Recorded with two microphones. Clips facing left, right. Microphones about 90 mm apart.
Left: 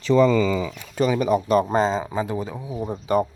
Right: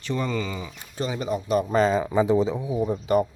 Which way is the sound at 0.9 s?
85° left.